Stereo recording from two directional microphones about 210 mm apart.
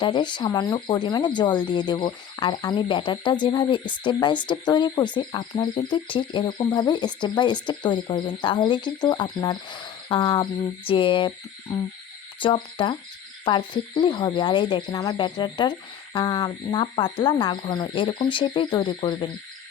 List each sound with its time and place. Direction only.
0.0 s speech: 20° left (ahead or behind)
12.4 s speech: 25° left (ahead or behind)